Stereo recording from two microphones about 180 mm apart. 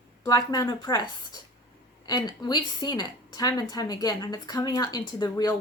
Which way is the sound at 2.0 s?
20° left (ahead or behind).